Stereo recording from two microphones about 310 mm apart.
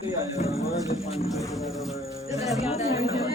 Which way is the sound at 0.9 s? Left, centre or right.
Centre.